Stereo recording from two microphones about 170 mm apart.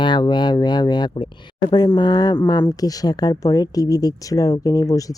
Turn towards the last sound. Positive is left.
turn(degrees=20)  # may be behind; listen again after turning